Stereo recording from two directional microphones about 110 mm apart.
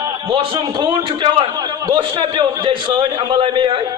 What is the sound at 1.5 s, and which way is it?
A man's voice, 35° right (ahead or behind).